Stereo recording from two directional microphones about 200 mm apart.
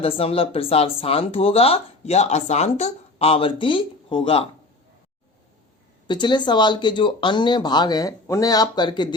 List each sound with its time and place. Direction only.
0.0 s speech: 30° left (ahead or behind)
6.1 s speech: 20° left (ahead or behind)